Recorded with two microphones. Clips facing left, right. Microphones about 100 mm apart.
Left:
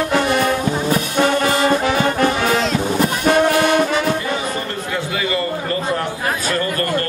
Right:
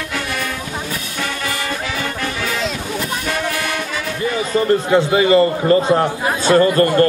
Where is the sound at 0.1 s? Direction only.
35° left (ahead or behind).